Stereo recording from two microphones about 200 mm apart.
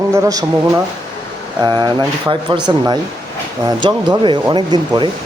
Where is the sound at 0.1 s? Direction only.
15° right (ahead or behind).